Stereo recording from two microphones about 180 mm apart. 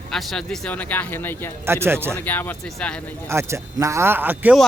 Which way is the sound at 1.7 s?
15° right (ahead or behind).